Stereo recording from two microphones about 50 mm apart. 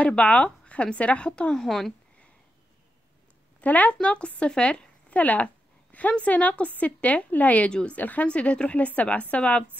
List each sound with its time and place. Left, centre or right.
0.0 s speech: left; by 2.0 s centre
3.6 s speech: left
5.2 s a woman's voice: left